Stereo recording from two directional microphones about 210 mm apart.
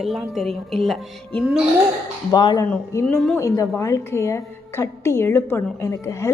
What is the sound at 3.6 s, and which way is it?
A woman's voice, 15° left (ahead or behind).